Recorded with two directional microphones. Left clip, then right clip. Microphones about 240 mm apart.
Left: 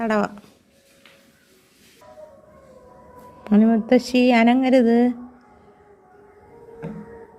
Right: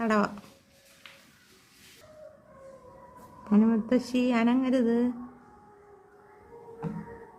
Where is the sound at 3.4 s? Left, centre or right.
Centre.